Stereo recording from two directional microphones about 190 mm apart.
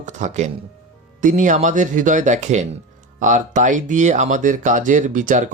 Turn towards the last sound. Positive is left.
turn(degrees=-45)  # may be behind; listen again after turning